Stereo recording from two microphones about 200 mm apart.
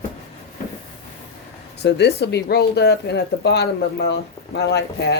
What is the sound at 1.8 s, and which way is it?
Speech, 55° left (ahead or behind).